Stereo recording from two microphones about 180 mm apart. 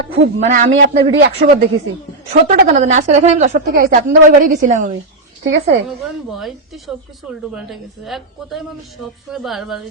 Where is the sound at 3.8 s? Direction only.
50° right (ahead or behind).